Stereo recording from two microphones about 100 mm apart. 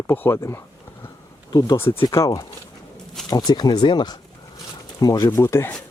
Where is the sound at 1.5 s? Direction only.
40° left (ahead or behind).